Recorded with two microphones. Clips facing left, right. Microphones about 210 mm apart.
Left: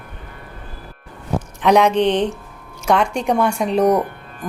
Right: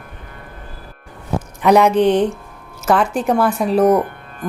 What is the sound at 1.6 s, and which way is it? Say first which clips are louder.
A woman's voice: right 2 dB; 5° right (ahead or behind).